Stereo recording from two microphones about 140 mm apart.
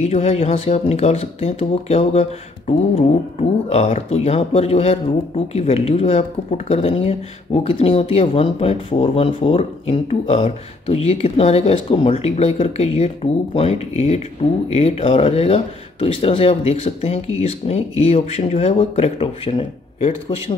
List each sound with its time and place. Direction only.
0.0 s speech: 50° left (ahead or behind)